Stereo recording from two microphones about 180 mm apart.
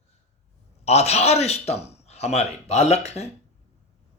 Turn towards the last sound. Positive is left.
turn(degrees=35)  # may be behind; listen again after turning